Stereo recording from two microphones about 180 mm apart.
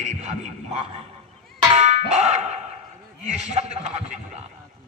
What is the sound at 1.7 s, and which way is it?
Clang, 35° right (ahead or behind).